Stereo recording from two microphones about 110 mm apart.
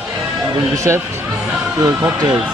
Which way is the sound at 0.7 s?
30° right (ahead or behind).